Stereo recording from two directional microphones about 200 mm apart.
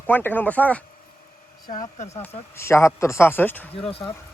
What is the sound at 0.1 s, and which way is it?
Speech, 10° left (ahead or behind).